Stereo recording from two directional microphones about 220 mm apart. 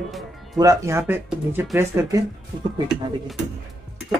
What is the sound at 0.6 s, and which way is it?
Speech, 15° right (ahead or behind).